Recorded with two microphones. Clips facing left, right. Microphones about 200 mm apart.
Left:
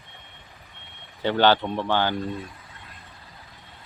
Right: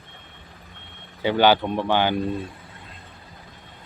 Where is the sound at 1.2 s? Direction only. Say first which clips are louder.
Right 2 dB; 10° right (ahead or behind).